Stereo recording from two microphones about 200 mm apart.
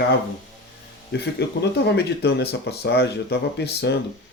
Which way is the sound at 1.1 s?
55° left (ahead or behind).